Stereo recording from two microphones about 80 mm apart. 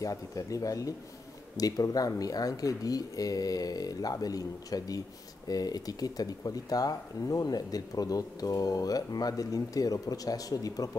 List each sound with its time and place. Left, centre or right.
0.0 s speech: left